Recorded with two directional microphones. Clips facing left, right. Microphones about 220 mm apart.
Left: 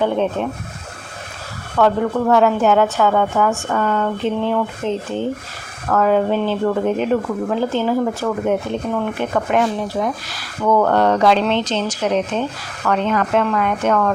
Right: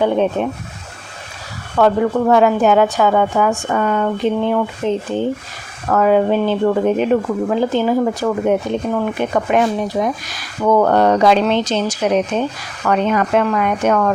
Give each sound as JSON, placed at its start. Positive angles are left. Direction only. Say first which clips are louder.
{"t": 0.0, "sound": "speech", "louder": "right 3 dB", "side_deg": -15}
{"t": 1.8, "sound": "speech", "louder": "right 2 dB", "side_deg": -15}